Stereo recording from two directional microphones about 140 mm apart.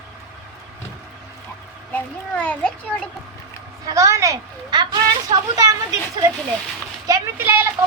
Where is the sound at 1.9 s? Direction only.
10° left (ahead or behind).